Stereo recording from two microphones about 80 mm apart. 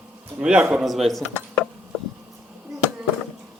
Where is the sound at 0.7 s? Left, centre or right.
Centre.